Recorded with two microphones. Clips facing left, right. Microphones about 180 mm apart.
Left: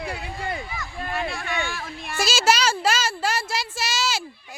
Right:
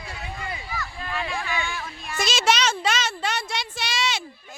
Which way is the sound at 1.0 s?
50° left (ahead or behind).